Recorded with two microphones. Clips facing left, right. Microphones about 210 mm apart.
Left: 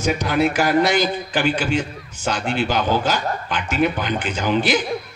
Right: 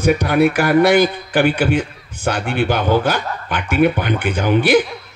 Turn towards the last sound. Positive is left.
turn(degrees=-55)  # may be behind; listen again after turning